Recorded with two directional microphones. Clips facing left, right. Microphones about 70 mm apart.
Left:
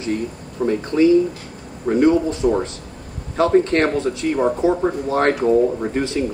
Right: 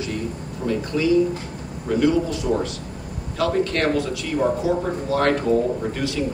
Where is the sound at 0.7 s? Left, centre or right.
Left.